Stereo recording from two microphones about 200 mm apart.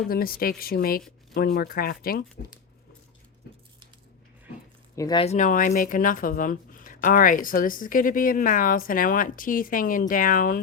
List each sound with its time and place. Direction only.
0.1 s speech: 50° left (ahead or behind)
4.9 s speech: 20° left (ahead or behind)
5.2 s speech: 35° left (ahead or behind)